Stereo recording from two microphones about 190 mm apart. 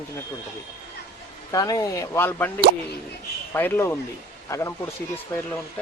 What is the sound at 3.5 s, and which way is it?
Speech, 10° left (ahead or behind).